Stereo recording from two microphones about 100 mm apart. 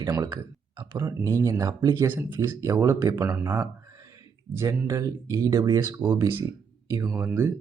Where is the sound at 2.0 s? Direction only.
25° right (ahead or behind).